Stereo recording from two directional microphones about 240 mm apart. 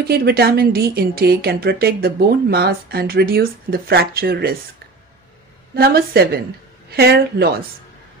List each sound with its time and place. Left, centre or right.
0.0 s a woman's voice: right
5.8 s a woman's voice: right